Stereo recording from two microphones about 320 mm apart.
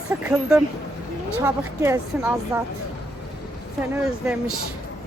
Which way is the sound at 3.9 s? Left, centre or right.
Centre.